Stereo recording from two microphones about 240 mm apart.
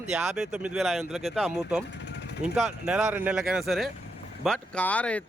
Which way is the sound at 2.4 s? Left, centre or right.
Centre.